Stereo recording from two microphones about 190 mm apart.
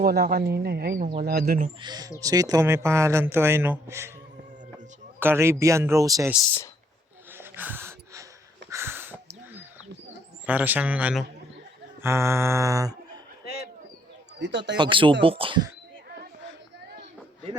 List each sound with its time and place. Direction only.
0.0 s speech: 55° right (ahead or behind)
1.8 s speech: 20° right (ahead or behind)
5.2 s speech: 10° right (ahead or behind)
7.3 s a sound: 10° right (ahead or behind)
10.4 s speech: 10° right (ahead or behind)
14.3 s speech: 70° right (ahead or behind)
14.8 s speech: 25° right (ahead or behind)